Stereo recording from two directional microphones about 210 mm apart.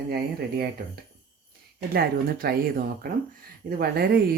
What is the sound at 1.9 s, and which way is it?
Speech, 45° right (ahead or behind).